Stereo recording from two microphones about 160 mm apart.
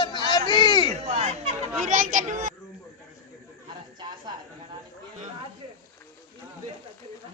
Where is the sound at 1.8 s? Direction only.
50° right (ahead or behind).